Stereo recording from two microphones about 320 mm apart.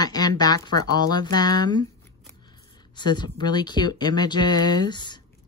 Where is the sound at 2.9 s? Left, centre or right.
Centre.